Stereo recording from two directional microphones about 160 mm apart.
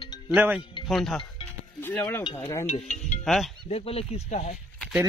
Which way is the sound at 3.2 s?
Centre (ahead or behind).